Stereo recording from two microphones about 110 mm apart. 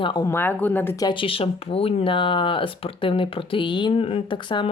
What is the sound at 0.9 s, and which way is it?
Speech, 35° left (ahead or behind).